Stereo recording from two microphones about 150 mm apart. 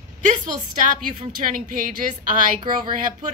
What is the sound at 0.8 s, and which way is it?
A woman's voice, 60° right (ahead or behind).